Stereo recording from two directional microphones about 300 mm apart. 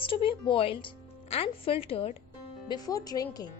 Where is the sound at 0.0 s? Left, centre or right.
Centre.